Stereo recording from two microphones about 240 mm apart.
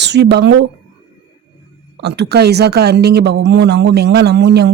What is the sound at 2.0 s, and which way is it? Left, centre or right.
Speech, right.